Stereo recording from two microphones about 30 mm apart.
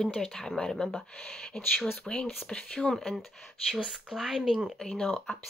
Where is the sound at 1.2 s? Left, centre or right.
Left.